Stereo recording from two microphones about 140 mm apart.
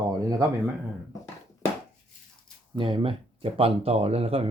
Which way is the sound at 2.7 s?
35° right (ahead or behind).